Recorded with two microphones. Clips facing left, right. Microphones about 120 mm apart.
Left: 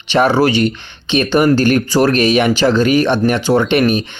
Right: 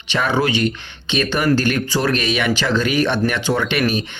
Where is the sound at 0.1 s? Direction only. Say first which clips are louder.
Left 7 dB; 30° left (ahead or behind).